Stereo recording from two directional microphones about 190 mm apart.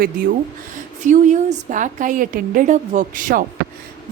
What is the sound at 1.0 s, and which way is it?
A woman's voice, 40° right (ahead or behind).